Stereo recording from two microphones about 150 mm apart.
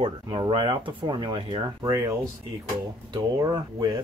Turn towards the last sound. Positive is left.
turn(degrees=-25)  # may be behind; listen again after turning